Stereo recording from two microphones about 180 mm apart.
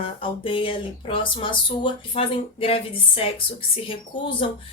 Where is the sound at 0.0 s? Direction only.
30° left (ahead or behind).